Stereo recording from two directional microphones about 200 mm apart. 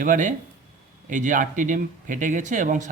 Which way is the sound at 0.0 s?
40° right (ahead or behind).